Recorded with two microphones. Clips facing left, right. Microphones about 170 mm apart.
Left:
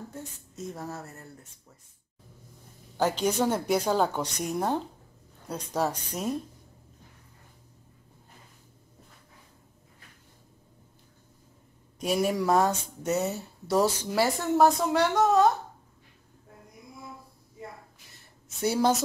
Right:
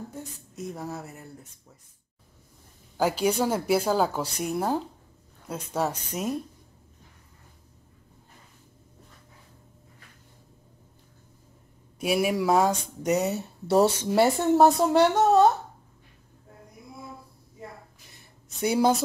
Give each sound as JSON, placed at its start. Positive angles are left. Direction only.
{"t": 0.7, "sound": "speech", "side_deg": 0}
{"t": 1.0, "sound": "speech", "side_deg": -15}
{"t": 3.0, "sound": "speech", "side_deg": -10}
{"t": 12.0, "sound": "speech", "side_deg": -10}
{"t": 18.6, "sound": "speech", "side_deg": -15}